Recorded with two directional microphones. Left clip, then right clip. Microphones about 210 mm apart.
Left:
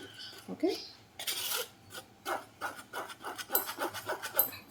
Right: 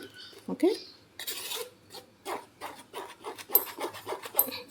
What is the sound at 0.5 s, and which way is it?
Speech, 45° right (ahead or behind).